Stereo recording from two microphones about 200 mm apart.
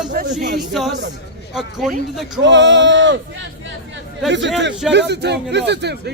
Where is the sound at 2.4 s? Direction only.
65° right (ahead or behind).